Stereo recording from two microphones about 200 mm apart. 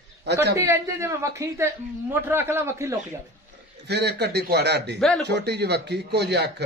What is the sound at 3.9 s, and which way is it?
Speech, 55° right (ahead or behind).